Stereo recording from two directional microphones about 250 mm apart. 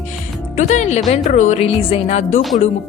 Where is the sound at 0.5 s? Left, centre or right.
Left.